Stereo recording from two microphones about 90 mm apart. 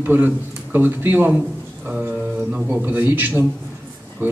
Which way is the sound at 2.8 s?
20° right (ahead or behind).